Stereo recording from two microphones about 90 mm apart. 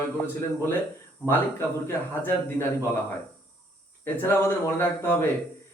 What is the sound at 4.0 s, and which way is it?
Speech, 25° left (ahead or behind).